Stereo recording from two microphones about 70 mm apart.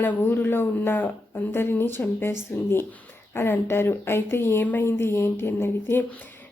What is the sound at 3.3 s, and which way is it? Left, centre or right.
Speech, left.